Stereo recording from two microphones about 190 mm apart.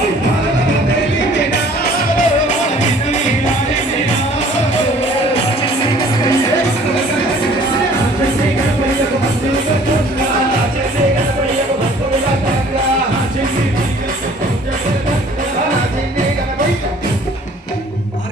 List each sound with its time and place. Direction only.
1.3 s music: 65° left (ahead or behind); by 3.5 s 40° left (ahead or behind)